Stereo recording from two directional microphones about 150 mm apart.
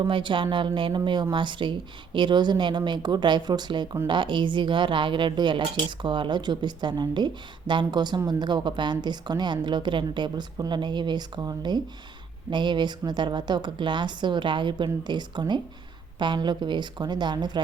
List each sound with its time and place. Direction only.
0.0 s a woman's voice: 35° right (ahead or behind)